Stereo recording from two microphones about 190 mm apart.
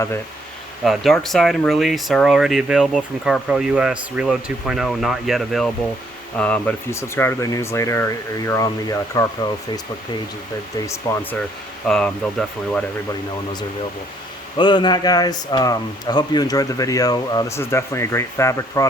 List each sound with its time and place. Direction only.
0.9 s speech: centre (ahead or behind); by 9.2 s 20° left (ahead or behind)
10.8 s speech: 15° left (ahead or behind)
14.6 s speech: 25° left (ahead or behind)